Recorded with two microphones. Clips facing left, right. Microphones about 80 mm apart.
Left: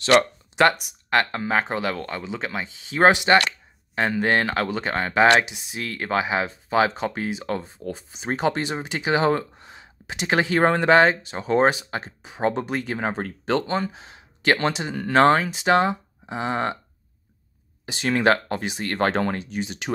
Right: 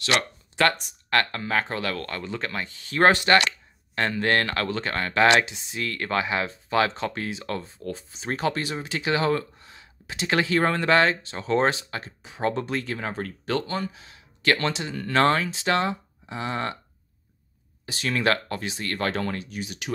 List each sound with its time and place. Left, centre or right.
0.0 s speech: left
0.6 s speech: centre
17.8 s speech: left